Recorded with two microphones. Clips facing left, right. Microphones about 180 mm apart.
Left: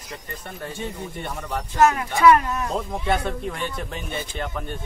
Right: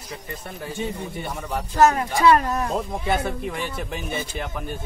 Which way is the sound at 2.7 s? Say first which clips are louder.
Even; 5° right (ahead or behind).